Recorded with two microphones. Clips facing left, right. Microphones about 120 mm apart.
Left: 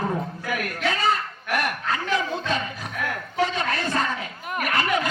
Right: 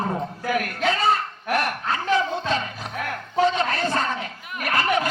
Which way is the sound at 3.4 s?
30° right (ahead or behind).